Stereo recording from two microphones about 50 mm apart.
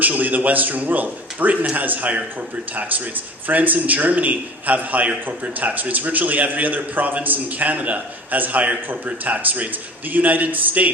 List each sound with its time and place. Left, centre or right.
0.0 s a man's voice: right
3.4 s a man's voice: right